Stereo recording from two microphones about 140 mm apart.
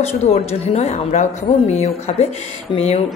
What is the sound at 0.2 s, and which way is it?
A woman's voice, 50° left (ahead or behind).